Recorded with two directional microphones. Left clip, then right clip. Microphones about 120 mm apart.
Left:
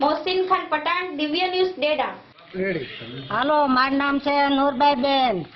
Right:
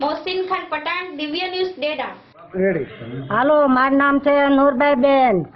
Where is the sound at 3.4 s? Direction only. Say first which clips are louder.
Right 4 dB; centre (ahead or behind).